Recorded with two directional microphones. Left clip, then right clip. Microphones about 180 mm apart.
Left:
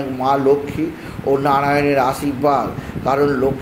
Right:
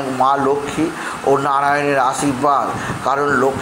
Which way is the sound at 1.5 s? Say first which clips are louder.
Even; 20° left (ahead or behind).